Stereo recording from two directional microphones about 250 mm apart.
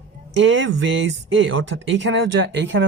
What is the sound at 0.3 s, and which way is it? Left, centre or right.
Speech, right.